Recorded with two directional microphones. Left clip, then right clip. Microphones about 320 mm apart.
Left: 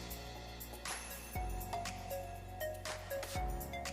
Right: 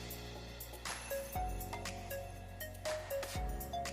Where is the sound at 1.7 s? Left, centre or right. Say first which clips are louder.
Left 2 dB; centre.